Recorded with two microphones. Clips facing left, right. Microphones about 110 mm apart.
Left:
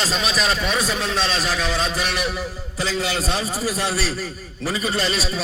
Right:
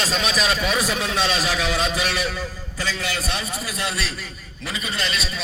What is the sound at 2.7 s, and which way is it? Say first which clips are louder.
A man's voice: left 4 dB; 25° left (ahead or behind).